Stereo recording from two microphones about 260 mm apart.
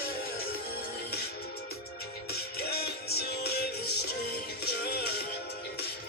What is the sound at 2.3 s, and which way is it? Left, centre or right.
Music, left.